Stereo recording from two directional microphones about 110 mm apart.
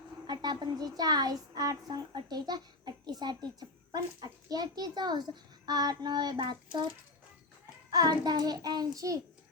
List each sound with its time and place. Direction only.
0.3 s speech: 40° right (ahead or behind)
7.9 s speech: 35° right (ahead or behind)